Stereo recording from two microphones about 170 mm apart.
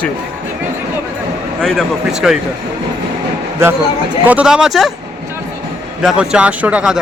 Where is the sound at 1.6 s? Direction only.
Centre (ahead or behind).